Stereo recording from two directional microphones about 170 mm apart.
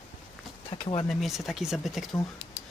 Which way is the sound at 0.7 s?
35° left (ahead or behind).